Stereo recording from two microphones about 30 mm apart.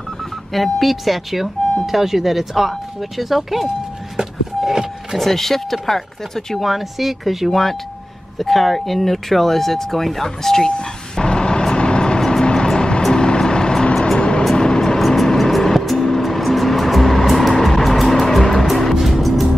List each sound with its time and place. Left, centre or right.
0.5 s speech: centre
4.6 s a sound: centre
5.2 s speech: centre
6.7 s speech: centre
10.8 s vehicle: left
15.0 s music: centre
18.9 s music: centre